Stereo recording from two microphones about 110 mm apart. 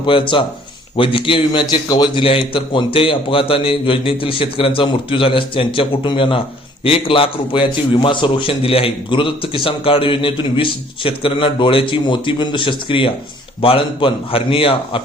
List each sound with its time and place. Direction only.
0.0 s a man's voice: 50° left (ahead or behind)
2.2 s a man's voice: 55° left (ahead or behind)